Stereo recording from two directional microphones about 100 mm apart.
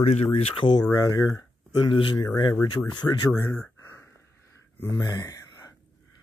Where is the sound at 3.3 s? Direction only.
25° left (ahead or behind).